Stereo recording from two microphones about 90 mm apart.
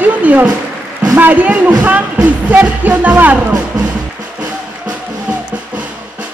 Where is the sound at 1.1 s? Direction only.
20° right (ahead or behind).